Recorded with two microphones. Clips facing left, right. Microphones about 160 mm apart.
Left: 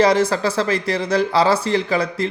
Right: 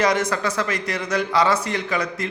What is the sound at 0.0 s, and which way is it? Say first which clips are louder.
Speech: left 5 dB; 30° left (ahead or behind).